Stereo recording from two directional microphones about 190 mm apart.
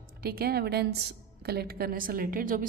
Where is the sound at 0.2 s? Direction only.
55° right (ahead or behind).